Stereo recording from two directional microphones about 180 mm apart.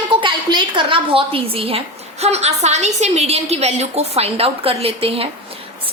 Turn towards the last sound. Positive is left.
turn(degrees=-30)  # may be behind; listen again after turning